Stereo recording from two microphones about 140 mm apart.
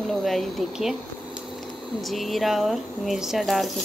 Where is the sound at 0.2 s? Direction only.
Centre (ahead or behind).